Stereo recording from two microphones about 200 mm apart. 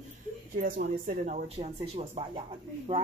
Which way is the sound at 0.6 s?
45° right (ahead or behind).